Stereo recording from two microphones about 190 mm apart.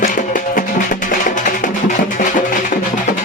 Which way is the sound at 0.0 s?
45° left (ahead or behind).